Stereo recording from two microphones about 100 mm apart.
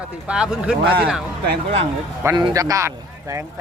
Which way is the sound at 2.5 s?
35° right (ahead or behind).